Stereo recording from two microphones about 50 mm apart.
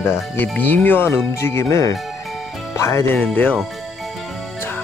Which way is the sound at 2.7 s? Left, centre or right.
Left.